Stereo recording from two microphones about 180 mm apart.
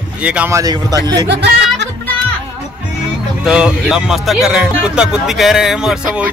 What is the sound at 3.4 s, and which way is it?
Speech, 5° right (ahead or behind).